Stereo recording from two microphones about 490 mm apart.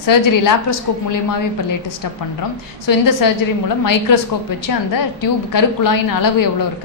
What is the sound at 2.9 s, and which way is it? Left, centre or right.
A woman's voice, left.